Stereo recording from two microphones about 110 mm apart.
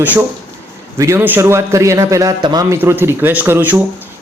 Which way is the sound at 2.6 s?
20° right (ahead or behind).